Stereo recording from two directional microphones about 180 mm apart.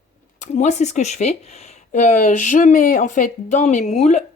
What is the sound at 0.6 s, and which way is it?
Speech, 40° left (ahead or behind).